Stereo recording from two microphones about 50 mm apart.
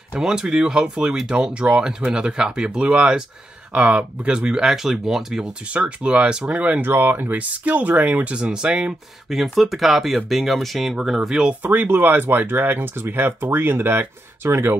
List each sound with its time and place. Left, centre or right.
0.2 s speech: centre
5.7 s speech: right
6.8 s speech: right
7.3 s speech: right
9.3 s speech: centre
11.6 s speech: right